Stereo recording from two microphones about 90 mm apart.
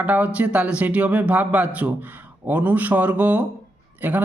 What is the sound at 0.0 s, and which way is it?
Speech, 15° right (ahead or behind).